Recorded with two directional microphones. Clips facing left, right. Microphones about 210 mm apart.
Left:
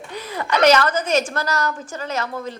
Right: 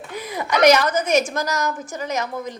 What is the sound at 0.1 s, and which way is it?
A woman's voice, 10° right (ahead or behind).